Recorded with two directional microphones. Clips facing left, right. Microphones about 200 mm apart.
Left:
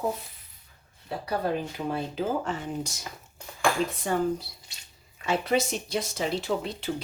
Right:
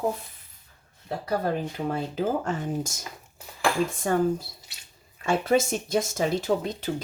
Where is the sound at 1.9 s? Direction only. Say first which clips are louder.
Right 2 dB; 45° right (ahead or behind).